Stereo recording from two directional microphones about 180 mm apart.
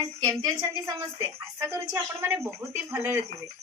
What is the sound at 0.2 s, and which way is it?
Speech, 20° right (ahead or behind).